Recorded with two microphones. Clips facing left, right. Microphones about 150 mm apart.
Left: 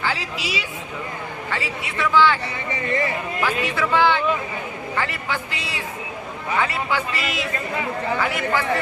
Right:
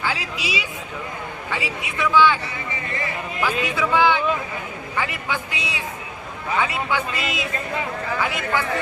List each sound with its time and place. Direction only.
0.0 s a man's voice: 15° right (ahead or behind)
2.7 s speech: 35° left (ahead or behind)
3.4 s a man's voice: 15° right (ahead or behind)